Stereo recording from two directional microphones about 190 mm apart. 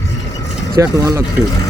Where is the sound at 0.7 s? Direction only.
15° right (ahead or behind).